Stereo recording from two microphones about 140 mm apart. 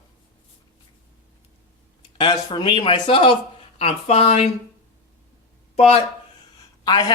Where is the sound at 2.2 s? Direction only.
35° left (ahead or behind).